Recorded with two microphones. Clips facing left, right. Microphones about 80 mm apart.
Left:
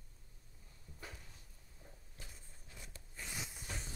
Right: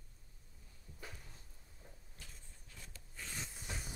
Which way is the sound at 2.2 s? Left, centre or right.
Left.